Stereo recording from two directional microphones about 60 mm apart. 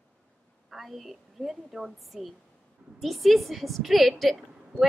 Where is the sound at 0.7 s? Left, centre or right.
Centre.